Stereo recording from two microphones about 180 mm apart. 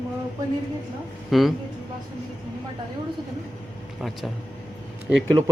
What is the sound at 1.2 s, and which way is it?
Speech, centre (ahead or behind).